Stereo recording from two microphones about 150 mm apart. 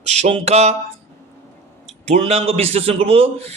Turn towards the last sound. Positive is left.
turn(degrees=-40)  # may be behind; listen again after turning